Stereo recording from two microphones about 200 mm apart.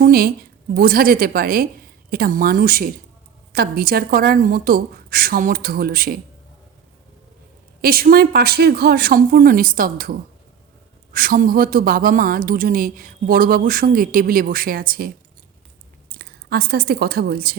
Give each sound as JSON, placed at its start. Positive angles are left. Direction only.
{"t": 0.0, "sound": "a woman's voice", "side_deg": -50}
{"t": 7.8, "sound": "speech", "side_deg": -50}
{"t": 16.1, "sound": "a woman's voice", "side_deg": -50}